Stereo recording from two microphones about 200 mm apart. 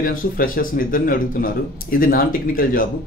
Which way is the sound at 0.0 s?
45° left (ahead or behind).